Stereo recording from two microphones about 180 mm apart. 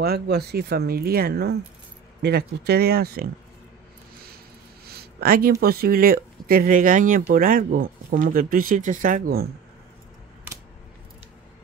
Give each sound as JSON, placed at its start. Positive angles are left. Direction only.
{"t": 0.0, "sound": "speech", "side_deg": -60}
{"t": 4.8, "sound": "a sound", "side_deg": -55}
{"t": 5.6, "sound": "speech", "side_deg": -55}